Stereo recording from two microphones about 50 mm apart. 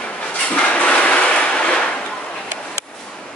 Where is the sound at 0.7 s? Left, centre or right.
Left.